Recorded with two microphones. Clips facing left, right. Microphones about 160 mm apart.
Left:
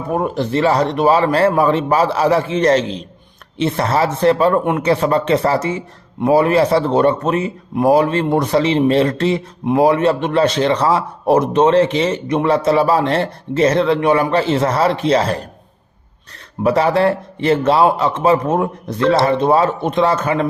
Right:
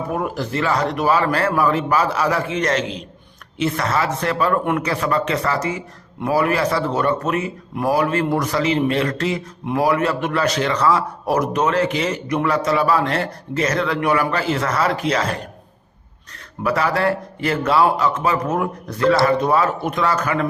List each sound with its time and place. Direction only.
0.1 s speech: 30° left (ahead or behind)
16.6 s speech: 25° left (ahead or behind)